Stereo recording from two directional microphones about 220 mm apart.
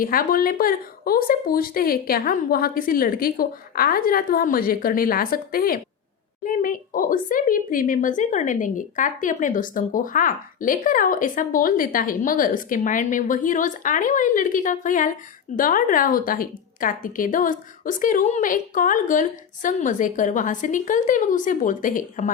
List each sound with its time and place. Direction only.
0.0 s a woman's voice: 40° left (ahead or behind)